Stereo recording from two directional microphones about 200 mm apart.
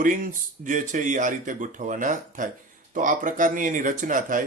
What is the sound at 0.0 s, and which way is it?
Speech, 40° right (ahead or behind).